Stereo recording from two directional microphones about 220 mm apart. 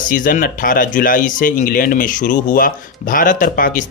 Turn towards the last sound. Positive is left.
turn(degrees=40)  # may be behind; listen again after turning